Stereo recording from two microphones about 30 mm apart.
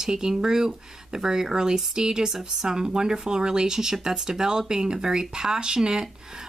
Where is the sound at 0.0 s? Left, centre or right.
Right.